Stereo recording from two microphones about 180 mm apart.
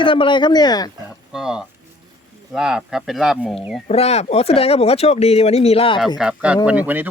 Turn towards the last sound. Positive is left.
turn(degrees=-10)  # may be behind; listen again after turning